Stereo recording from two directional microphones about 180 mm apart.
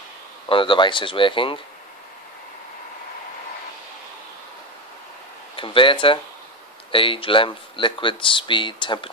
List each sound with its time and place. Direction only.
0.5 s speech: 30° left (ahead or behind)
5.6 s speech: 30° left (ahead or behind)